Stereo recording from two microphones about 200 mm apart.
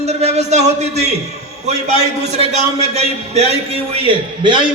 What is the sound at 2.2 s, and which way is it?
A man's voice, 35° right (ahead or behind).